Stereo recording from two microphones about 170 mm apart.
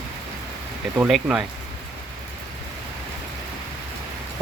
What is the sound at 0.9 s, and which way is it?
Speech, 5° right (ahead or behind).